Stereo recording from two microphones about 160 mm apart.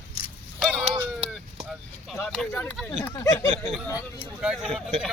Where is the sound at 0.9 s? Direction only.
35° right (ahead or behind).